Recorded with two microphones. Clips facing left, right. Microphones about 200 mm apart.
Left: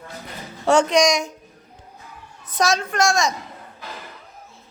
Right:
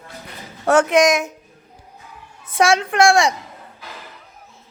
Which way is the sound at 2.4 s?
10° right (ahead or behind).